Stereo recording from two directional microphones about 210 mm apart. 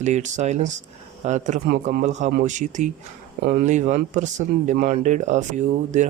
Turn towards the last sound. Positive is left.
turn(degrees=-35)  # may be behind; listen again after turning